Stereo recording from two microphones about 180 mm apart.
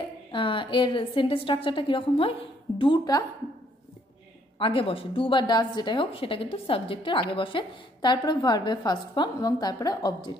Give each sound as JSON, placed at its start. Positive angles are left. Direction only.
{"t": 0.3, "sound": "a woman's voice", "side_deg": 30}
{"t": 4.6, "sound": "a woman's voice", "side_deg": 30}